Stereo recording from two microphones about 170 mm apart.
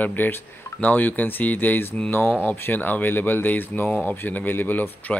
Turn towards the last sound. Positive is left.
turn(degrees=10)  # may be behind; listen again after turning